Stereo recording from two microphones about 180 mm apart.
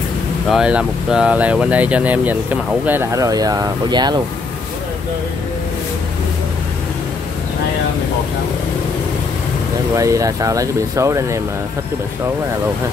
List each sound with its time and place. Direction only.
0.5 s speech: 5° right (ahead or behind); by 4.2 s 25° right (ahead or behind)
9.9 s speech: 20° right (ahead or behind)